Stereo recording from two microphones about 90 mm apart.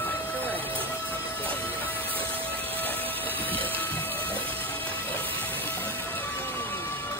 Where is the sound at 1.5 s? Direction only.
20° left (ahead or behind).